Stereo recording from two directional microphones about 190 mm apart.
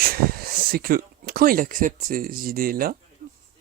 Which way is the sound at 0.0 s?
50° right (ahead or behind).